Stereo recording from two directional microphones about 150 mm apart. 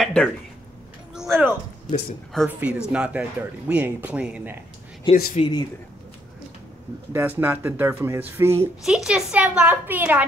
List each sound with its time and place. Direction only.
0.0 s speech: 10° left (ahead or behind)
1.1 s a sound: 5° right (ahead or behind)
2.4 s speech: 10° right (ahead or behind)
5.1 s speech: 40° left (ahead or behind)
5.4 s speech: 25° left (ahead or behind)
7.1 s speech: 15° right (ahead or behind)
8.8 s speech: 5° right (ahead or behind)